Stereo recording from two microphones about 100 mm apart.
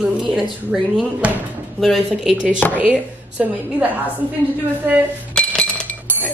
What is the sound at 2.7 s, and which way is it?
A woman's voice, 15° right (ahead or behind).